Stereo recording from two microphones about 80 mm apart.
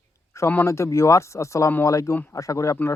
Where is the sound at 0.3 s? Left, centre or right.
Left.